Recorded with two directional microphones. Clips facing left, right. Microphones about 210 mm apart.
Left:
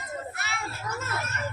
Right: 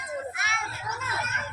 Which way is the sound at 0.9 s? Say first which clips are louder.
Left 4 dB; 45° left (ahead or behind).